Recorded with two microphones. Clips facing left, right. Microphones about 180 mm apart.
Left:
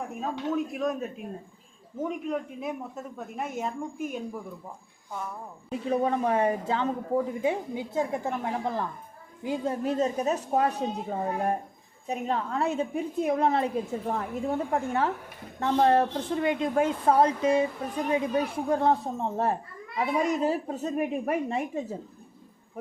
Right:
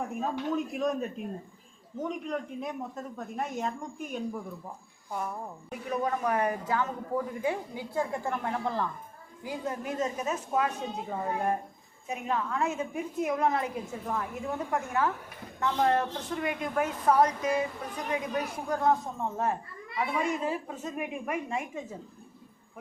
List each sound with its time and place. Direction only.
0.1 s a woman's voice: centre (ahead or behind)
5.7 s a woman's voice: 25° left (ahead or behind)
9.4 s a woman's voice: 25° left (ahead or behind)